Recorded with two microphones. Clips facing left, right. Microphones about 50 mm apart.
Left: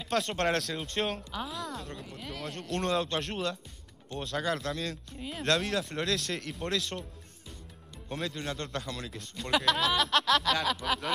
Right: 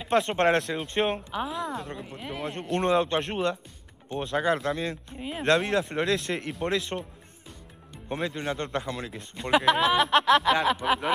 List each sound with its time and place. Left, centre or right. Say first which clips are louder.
0.0 s speech: right 6 dB; right
8.1 s speech: right 5 dB; right